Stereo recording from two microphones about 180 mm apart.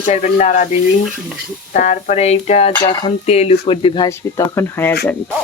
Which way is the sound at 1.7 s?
45° left (ahead or behind).